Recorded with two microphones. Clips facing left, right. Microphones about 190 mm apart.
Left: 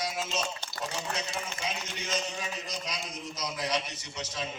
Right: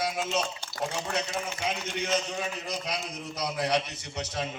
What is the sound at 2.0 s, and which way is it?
A man's voice, 60° right (ahead or behind).